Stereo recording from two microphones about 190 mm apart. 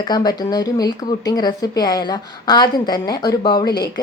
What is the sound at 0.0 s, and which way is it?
A woman's voice, 20° left (ahead or behind).